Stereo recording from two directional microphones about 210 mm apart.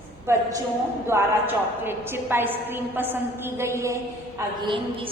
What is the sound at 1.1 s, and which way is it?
A woman's voice, 10° right (ahead or behind).